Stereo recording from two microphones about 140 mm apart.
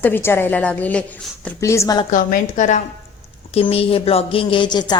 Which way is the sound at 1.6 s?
20° left (ahead or behind).